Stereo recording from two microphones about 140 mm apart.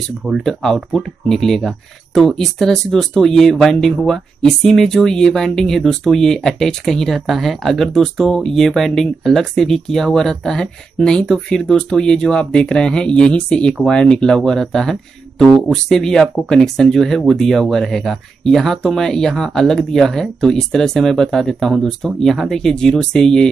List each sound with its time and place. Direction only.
0.3 s speech: centre (ahead or behind)